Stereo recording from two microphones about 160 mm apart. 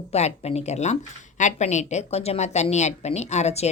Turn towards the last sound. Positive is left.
turn(degrees=45)  # may be behind; listen again after turning